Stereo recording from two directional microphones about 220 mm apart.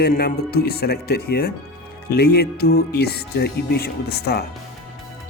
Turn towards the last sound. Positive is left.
turn(degrees=45)  # may be behind; listen again after turning